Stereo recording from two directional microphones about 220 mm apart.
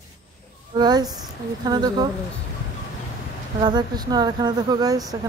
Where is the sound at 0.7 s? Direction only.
20° right (ahead or behind).